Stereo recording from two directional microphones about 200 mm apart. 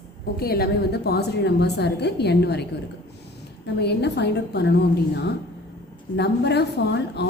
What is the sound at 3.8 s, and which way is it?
A woman's voice, 55° left (ahead or behind).